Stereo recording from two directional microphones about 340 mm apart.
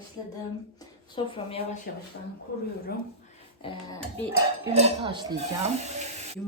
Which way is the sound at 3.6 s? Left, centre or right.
Centre.